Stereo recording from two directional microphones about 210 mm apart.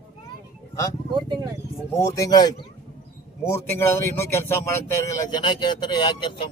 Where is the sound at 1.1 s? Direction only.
20° right (ahead or behind).